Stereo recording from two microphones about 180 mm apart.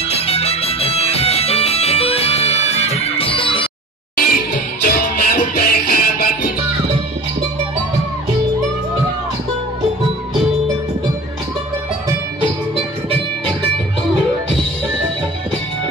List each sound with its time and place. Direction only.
0.1 s music: 35° left (ahead or behind)
4.4 s music: 50° left (ahead or behind)